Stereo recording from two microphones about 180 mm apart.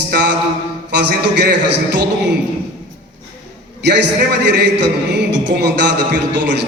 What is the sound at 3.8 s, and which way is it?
A man's voice, 70° right (ahead or behind).